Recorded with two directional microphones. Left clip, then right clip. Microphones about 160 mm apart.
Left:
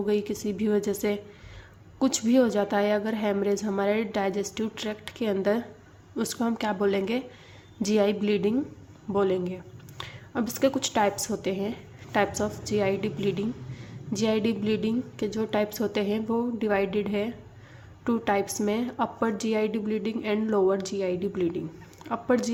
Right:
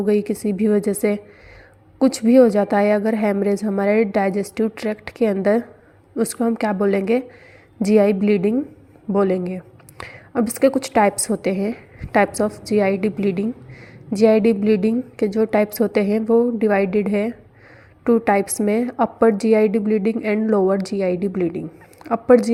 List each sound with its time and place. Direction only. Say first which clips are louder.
0.6 s a woman's voice: right 7 dB; 30° right (ahead or behind)